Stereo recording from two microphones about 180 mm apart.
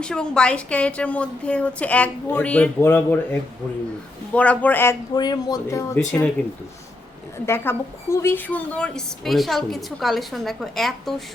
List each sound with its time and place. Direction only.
0.0 s a woman's voice: 5° left (ahead or behind)
4.4 s a woman's voice: 10° left (ahead or behind)
5.1 s speech: 25° left (ahead or behind)
7.3 s a woman's voice: 15° left (ahead or behind)